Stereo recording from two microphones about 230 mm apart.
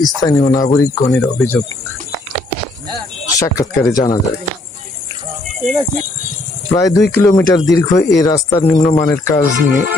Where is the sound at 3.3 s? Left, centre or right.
Centre.